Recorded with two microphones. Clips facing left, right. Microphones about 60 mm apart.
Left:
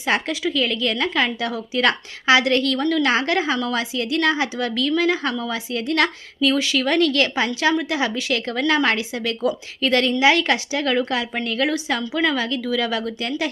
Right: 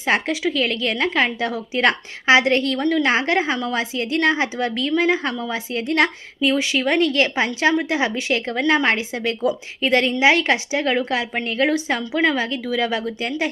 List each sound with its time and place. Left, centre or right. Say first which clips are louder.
0.0 s a woman's voice: right 2 dB; right